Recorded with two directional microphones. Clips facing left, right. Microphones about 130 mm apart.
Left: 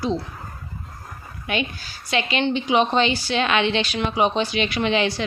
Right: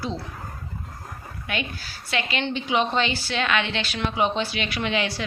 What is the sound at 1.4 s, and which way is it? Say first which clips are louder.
A woman's voice: left 5 dB; 20° left (ahead or behind).